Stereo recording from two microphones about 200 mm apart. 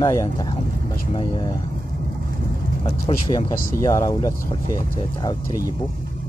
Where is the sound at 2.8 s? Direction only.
20° left (ahead or behind).